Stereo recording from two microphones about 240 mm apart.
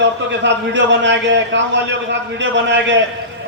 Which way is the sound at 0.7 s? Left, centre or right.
Right.